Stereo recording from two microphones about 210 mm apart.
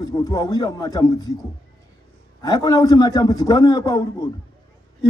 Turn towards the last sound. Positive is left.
turn(degrees=20)  # may be behind; listen again after turning